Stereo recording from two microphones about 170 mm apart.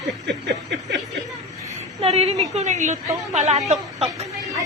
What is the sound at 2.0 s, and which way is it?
A woman's voice, 35° right (ahead or behind).